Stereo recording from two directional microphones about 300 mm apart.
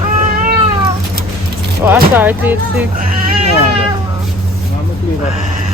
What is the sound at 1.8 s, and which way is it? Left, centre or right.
Speech, centre.